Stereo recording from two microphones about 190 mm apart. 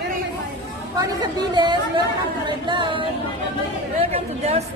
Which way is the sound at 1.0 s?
20° right (ahead or behind).